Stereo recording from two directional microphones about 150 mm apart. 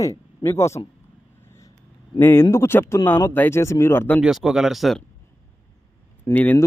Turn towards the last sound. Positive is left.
turn(degrees=10)  # may be behind; listen again after turning